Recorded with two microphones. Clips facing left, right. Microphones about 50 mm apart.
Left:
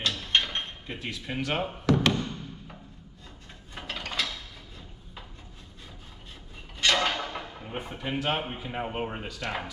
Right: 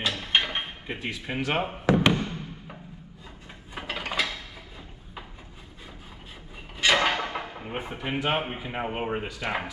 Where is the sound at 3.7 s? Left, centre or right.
Centre.